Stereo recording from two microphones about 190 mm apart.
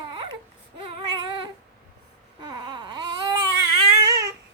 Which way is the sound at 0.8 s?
25° right (ahead or behind).